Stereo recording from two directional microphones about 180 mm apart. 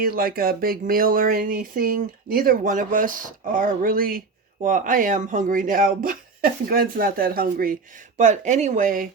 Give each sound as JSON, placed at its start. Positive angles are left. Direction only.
{"t": 0.0, "sound": "speech", "side_deg": -55}
{"t": 8.2, "sound": "speech", "side_deg": -40}